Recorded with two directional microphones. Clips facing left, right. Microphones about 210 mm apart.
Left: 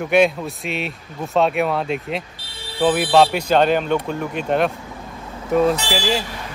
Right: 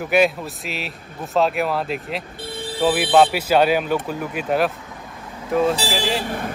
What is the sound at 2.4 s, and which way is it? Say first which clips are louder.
Vehicle: right 9 dB; 50° right (ahead or behind).